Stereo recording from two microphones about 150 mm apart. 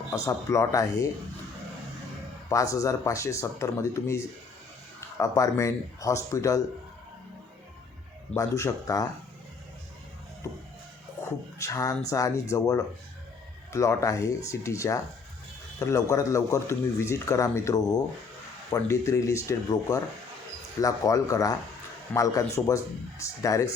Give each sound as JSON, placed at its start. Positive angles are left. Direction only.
{"t": 0.1, "sound": "speech", "side_deg": 20}
{"t": 2.5, "sound": "speech", "side_deg": 20}
{"t": 8.4, "sound": "speech", "side_deg": 20}
{"t": 11.6, "sound": "speech", "side_deg": 20}